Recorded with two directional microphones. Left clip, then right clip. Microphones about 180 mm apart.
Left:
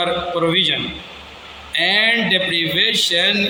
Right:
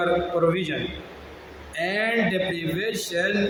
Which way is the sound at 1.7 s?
15° right (ahead or behind).